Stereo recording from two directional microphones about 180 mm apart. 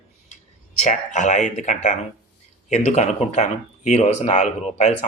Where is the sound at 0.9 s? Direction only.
45° left (ahead or behind).